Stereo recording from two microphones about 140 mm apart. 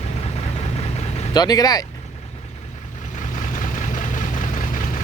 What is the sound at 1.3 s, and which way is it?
Speech, 30° left (ahead or behind).